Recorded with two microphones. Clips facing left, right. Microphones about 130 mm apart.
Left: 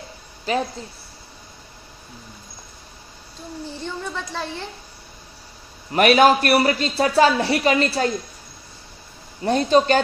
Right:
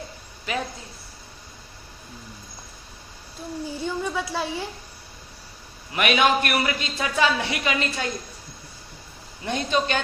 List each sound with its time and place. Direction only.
0.5 s a man's voice: 35° left (ahead or behind)
3.7 s a woman's voice: 10° right (ahead or behind)
5.9 s a man's voice: 40° left (ahead or behind)
9.4 s a man's voice: 35° left (ahead or behind)